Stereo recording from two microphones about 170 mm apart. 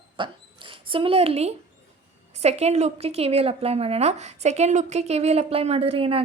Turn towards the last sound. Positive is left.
turn(degrees=-35)  # may be behind; listen again after turning